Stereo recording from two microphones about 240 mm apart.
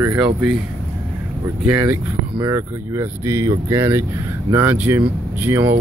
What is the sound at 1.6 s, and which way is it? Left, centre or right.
Speech, centre.